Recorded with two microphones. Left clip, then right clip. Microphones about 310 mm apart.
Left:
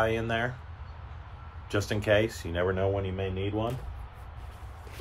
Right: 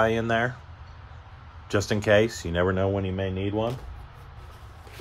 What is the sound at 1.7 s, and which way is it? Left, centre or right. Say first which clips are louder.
Speech: right 4 dB; right.